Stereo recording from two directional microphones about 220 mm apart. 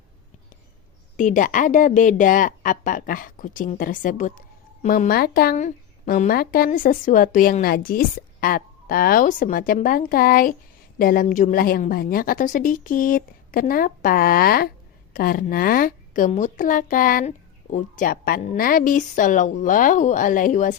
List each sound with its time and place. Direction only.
1.1 s a woman's voice: 35° left (ahead or behind)